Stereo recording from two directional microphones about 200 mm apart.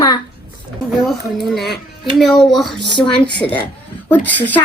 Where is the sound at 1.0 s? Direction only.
Centre (ahead or behind).